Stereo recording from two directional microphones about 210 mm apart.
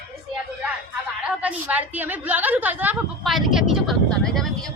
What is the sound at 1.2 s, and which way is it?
A woman's voice, 5° right (ahead or behind).